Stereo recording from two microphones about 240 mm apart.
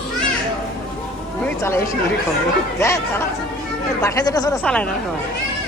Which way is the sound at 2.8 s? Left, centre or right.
Centre.